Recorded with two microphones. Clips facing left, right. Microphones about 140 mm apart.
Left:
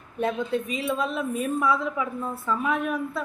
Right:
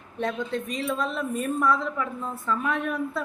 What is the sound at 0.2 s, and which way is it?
Speech, 10° left (ahead or behind).